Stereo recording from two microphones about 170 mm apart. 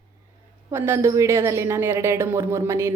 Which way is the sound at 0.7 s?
15° right (ahead or behind).